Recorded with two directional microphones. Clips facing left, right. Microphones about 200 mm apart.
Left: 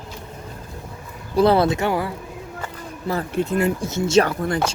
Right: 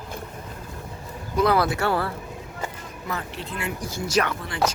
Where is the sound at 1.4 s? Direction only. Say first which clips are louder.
Left 5 dB; 30° left (ahead or behind).